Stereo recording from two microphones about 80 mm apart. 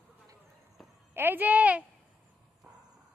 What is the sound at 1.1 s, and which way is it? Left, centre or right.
Speech, right.